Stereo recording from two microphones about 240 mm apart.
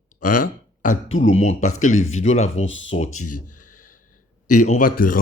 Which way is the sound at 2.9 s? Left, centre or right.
Left.